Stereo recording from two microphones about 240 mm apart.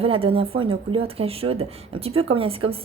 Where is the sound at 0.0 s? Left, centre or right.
Right.